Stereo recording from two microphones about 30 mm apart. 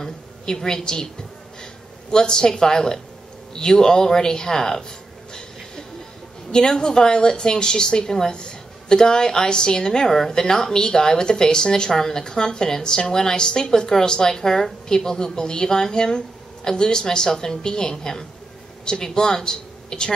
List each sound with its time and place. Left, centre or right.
0.5 s speech: centre
6.5 s a woman's voice: left